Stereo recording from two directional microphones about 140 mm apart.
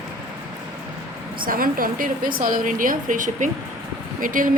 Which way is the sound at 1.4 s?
90° right.